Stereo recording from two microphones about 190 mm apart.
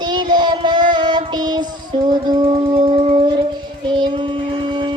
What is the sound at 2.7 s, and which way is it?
Music, 30° right (ahead or behind).